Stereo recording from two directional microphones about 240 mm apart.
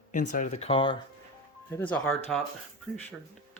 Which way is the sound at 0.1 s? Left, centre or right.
Left.